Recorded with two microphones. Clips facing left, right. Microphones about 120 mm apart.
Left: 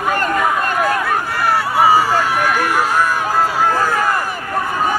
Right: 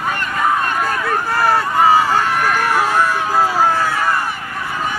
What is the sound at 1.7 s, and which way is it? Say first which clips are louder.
Run: left 1 dB; 10° left (ahead or behind).